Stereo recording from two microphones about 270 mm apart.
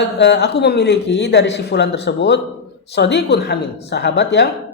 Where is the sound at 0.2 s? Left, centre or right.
Left.